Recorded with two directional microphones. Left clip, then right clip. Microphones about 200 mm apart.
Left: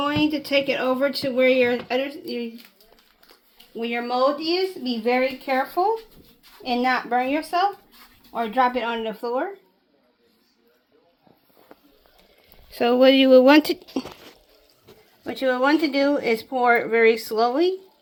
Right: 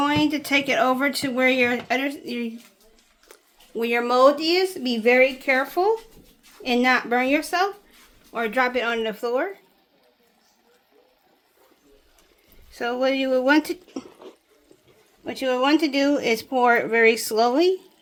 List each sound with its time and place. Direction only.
0.1 s speech: 30° right (ahead or behind)
3.8 s speech: 55° right (ahead or behind)
4.9 s speech: 25° right (ahead or behind)
12.7 s speech: 25° left (ahead or behind)
15.2 s speech: 15° right (ahead or behind); by 17.7 s 35° right (ahead or behind)